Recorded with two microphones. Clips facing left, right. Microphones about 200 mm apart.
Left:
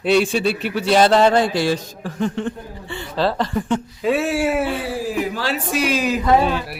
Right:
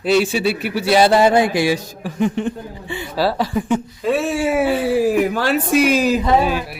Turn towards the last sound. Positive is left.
turn(degrees=-10)  # may be behind; listen again after turning